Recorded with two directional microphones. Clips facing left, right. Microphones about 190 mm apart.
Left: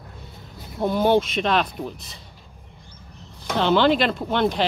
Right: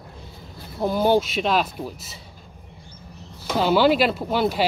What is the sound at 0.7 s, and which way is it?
Speech, 5° right (ahead or behind).